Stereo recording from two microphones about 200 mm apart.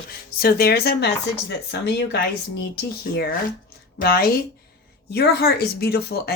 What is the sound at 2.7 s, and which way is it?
Speech, 50° left (ahead or behind).